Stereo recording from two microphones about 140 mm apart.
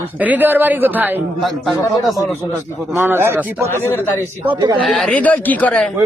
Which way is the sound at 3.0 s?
15° right (ahead or behind).